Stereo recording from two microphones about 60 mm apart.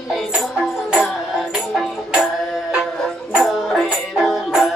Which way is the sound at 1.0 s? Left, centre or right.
Centre.